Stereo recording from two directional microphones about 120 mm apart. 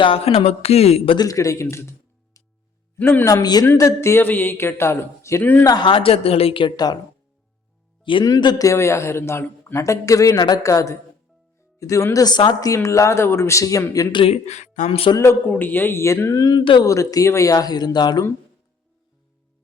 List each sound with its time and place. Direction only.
0.0 s speech: 55° left (ahead or behind)
1.1 s a man's voice: 30° left (ahead or behind)
1.6 s music: 20° left (ahead or behind)
2.9 s speech: 20° left (ahead or behind)
3.2 s a man's voice: 30° left (ahead or behind); by 5.6 s 15° left (ahead or behind)
5.6 s a woman's voice: 40° left (ahead or behind)
8.2 s a man's voice: 35° left (ahead or behind)
14.2 s speech: 60° left (ahead or behind); by 14.8 s 80° left
14.8 s a woman's voice: 55° left (ahead or behind)
15.1 s a man's voice: 20° left (ahead or behind); by 16.9 s 40° left (ahead or behind)
16.9 s speech: 30° left (ahead or behind)